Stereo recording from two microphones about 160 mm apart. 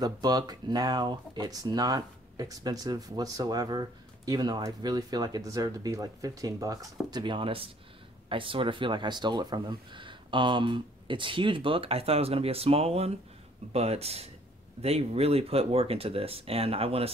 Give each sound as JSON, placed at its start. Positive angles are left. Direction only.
{"t": 0.0, "sound": "speech", "side_deg": -25}